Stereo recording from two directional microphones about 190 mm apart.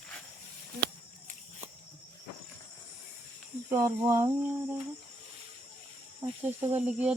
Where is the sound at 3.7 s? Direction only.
20° right (ahead or behind).